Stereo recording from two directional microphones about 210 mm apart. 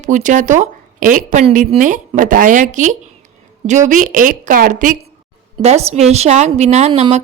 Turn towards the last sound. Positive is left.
turn(degrees=-30)  # may be behind; listen again after turning